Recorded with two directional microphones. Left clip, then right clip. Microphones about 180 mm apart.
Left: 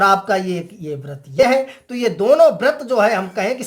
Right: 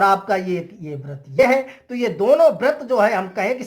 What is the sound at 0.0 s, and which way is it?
A woman's voice, 15° left (ahead or behind).